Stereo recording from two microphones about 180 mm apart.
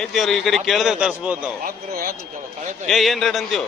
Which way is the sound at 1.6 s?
50° right (ahead or behind).